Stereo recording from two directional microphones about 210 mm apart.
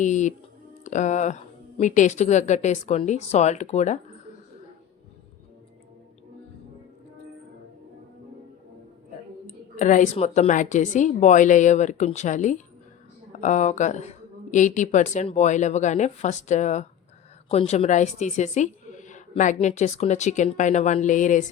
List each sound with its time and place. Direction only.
0.0 s a woman's voice: 35° left (ahead or behind)
9.7 s a woman's voice: 35° left (ahead or behind)